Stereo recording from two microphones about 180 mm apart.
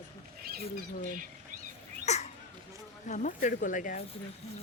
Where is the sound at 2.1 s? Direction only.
40° left (ahead or behind).